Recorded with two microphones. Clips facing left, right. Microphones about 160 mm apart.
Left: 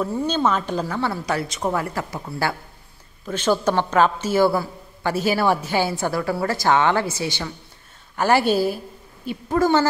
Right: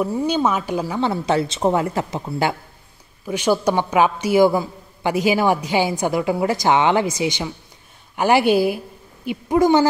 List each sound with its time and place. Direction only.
0.0 s a woman's voice: 10° right (ahead or behind)